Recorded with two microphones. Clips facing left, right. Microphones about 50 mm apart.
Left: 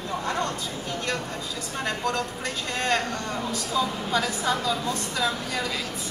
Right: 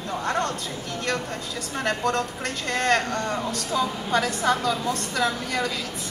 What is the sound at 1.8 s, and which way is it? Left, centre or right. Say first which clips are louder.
Speech: right 3 dB; right.